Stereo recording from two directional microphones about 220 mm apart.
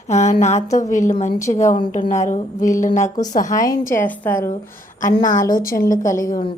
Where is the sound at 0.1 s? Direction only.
30° left (ahead or behind).